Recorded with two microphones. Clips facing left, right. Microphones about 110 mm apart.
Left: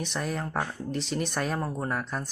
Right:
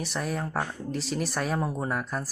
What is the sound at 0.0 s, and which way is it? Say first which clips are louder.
Speech: right 1 dB; centre (ahead or behind).